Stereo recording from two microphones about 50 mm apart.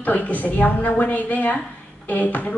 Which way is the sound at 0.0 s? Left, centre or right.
Left.